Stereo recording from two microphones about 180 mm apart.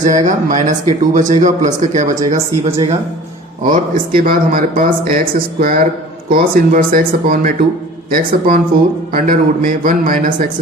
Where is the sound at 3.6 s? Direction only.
50° right (ahead or behind).